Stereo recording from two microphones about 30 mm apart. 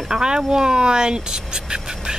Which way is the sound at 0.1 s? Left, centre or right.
Right.